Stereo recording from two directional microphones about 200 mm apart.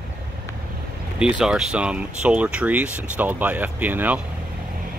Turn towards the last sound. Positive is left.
turn(degrees=-10)  # may be behind; listen again after turning